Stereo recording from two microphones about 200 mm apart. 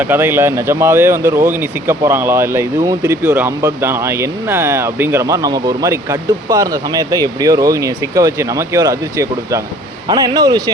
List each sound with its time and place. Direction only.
0.0 s speech: 10° right (ahead or behind)